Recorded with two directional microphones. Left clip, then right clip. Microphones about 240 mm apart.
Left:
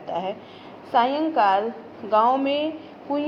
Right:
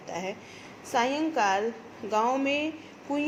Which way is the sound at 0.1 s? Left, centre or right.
Right.